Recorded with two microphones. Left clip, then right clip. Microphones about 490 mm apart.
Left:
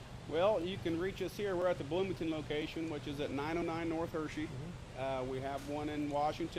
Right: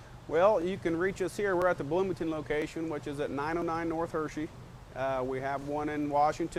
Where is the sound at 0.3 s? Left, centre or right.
Right.